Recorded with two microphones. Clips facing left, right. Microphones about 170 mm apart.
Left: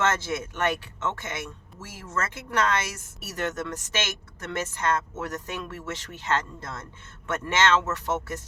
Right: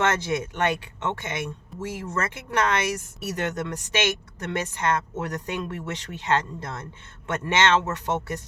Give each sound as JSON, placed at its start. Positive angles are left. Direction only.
{"t": 0.2, "sound": "speech", "side_deg": -15}